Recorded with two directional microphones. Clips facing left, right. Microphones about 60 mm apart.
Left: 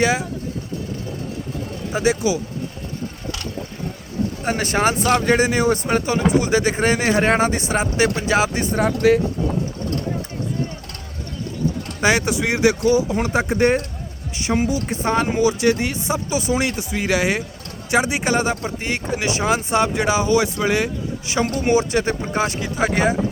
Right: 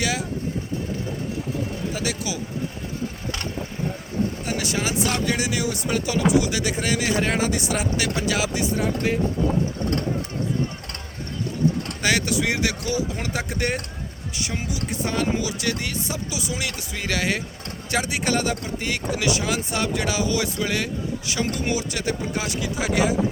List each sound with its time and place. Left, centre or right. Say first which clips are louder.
0.0 s speech: left 7 dB; left
1.9 s speech: left 8 dB; left
4.4 s speech: left 7 dB; left
8.8 s speech: left 11 dB; left
12.0 s speech: left 4 dB; left